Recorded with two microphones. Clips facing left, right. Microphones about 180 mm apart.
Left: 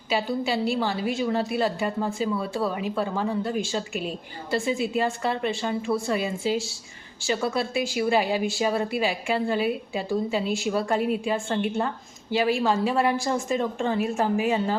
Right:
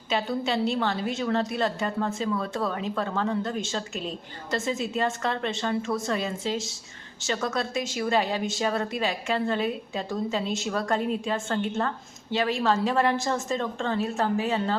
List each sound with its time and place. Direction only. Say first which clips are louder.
0.1 s speech: left 1 dB; 5° left (ahead or behind)